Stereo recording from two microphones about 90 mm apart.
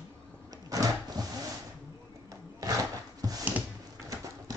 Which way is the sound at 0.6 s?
40° right (ahead or behind).